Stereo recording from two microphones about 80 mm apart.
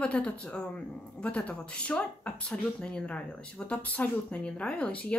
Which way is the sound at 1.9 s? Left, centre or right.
Centre.